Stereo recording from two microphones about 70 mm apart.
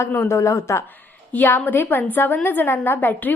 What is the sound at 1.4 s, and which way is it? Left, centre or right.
A woman's voice, left.